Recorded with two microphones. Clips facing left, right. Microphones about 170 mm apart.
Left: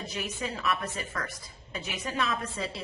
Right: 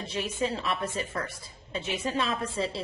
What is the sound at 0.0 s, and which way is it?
A woman's voice, 30° right (ahead or behind).